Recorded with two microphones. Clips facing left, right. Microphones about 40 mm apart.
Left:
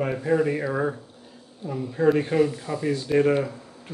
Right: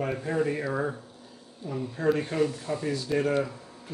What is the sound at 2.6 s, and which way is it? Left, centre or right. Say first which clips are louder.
Speech: left 4 dB; left.